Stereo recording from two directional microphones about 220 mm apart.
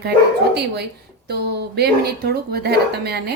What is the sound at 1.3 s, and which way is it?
A woman's voice, 45° right (ahead or behind).